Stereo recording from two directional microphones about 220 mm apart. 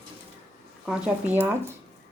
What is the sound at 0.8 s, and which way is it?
Speech, 5° right (ahead or behind).